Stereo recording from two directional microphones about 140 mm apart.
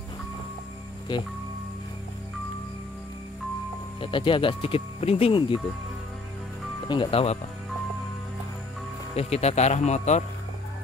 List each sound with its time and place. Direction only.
4.0 s speech: 35° left (ahead or behind)
6.9 s speech: 40° left (ahead or behind)
9.1 s speech: 50° left (ahead or behind)